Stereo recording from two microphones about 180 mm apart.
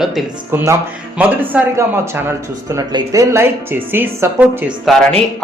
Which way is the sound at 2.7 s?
20° right (ahead or behind).